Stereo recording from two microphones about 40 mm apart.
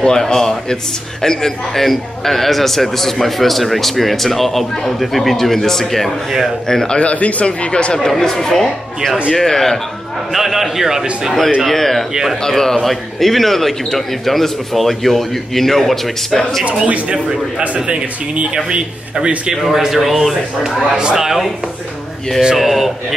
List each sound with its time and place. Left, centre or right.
0.0 s a man's voice: centre
6.7 s speech: centre
7.0 s speech: left
8.1 s speech: centre
10.3 s a man's voice: centre
11.6 s speech: centre
12.1 s a man's voice: centre
12.4 s a man's voice: centre
16.6 s speech: right
17.3 s a man's voice: centre
17.8 s speech: right
19.5 s a man's voice: centre
20.9 s a man's voice: centre
22.6 s a man's voice: centre